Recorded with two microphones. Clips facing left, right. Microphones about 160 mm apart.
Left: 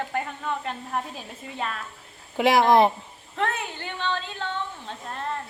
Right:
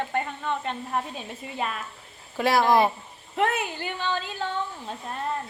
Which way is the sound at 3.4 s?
10° right (ahead or behind).